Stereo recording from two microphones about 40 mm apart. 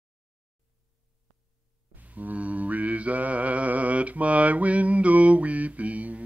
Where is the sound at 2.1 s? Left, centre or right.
Right.